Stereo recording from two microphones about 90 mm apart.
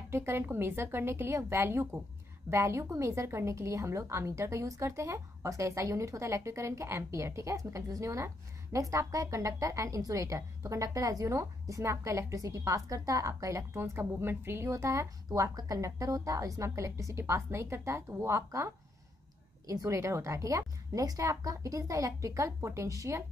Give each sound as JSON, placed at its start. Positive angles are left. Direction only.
{"t": 0.1, "sound": "a woman's voice", "side_deg": -30}
{"t": 19.7, "sound": "a woman's voice", "side_deg": -35}